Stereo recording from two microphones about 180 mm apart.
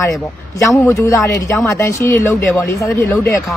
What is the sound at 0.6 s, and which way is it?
Speech, 15° left (ahead or behind).